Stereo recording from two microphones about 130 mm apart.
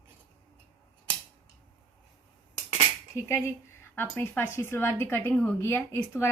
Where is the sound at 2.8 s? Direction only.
20° left (ahead or behind).